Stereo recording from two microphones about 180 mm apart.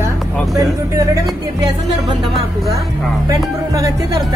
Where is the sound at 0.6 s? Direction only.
15° right (ahead or behind).